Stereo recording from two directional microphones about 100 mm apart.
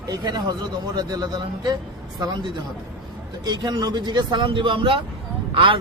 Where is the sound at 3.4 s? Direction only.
40° right (ahead or behind).